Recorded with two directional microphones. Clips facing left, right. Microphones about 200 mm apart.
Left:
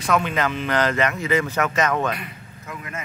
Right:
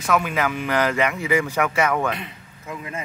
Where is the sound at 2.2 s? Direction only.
25° right (ahead or behind).